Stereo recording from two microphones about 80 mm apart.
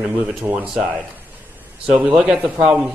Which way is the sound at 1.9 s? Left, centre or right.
Centre.